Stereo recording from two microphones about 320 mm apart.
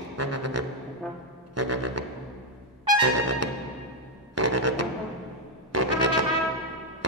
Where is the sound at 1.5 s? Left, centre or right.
Right.